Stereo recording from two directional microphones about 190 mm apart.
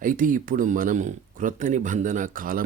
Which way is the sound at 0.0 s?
45° right (ahead or behind).